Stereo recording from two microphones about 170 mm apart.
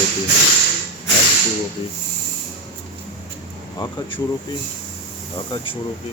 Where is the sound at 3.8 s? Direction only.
30° left (ahead or behind).